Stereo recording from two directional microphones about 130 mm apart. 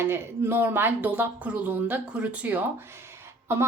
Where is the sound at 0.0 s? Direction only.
15° right (ahead or behind).